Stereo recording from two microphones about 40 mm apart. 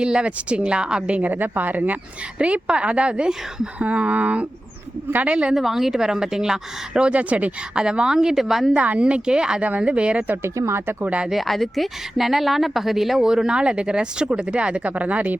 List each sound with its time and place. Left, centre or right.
0.0 s a woman's voice: right
1.1 s speech: right
2.4 s a woman's voice: right
5.5 s speech: centre
7.1 s speech: right
7.8 s speech: right
9.0 s a woman's voice: right
9.6 s speech: right
10.4 s speech: right
11.4 s speech: centre; by 15.4 s right